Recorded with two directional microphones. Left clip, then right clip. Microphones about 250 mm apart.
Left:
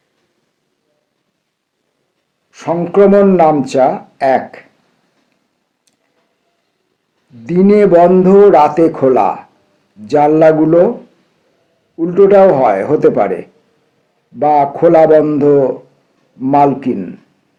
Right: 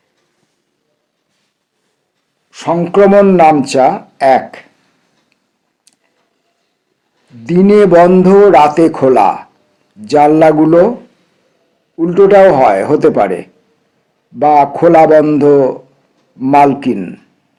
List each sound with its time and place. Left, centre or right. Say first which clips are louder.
2.5 s speech: right 3 dB; right
7.4 s speech: right 2 dB; right
11.9 s speech: right 1 dB; right